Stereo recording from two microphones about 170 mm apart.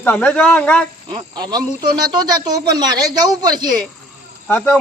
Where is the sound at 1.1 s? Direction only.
25° right (ahead or behind).